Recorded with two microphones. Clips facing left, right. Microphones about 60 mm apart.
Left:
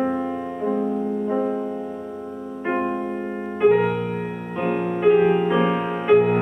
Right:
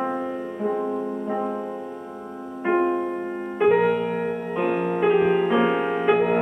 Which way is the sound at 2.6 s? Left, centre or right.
Centre.